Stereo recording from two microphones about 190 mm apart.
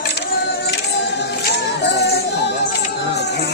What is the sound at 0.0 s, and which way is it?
Music, 60° left (ahead or behind).